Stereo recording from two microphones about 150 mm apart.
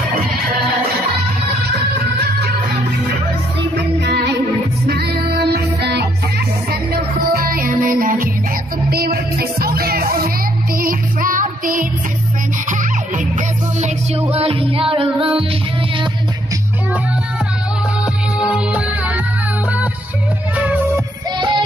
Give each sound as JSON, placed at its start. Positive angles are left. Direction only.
{"t": 4.8, "sound": "music", "side_deg": -90}
{"t": 6.9, "sound": "music", "side_deg": -70}
{"t": 8.9, "sound": "music", "side_deg": -90}
{"t": 10.8, "sound": "music", "side_deg": -65}
{"t": 14.3, "sound": "music", "side_deg": -40}
{"t": 18.4, "sound": "music", "side_deg": -5}
{"t": 20.5, "sound": "music", "side_deg": -10}
{"t": 21.4, "sound": "music", "side_deg": -30}